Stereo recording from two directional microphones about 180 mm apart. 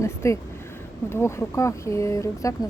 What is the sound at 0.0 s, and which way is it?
Speech, 15° left (ahead or behind).